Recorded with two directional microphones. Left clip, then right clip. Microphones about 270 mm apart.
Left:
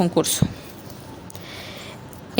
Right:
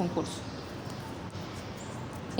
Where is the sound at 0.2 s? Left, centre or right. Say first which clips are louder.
Left 13 dB; left.